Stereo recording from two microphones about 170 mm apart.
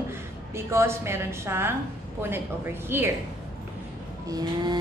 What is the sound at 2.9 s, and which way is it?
Speech, 15° right (ahead or behind).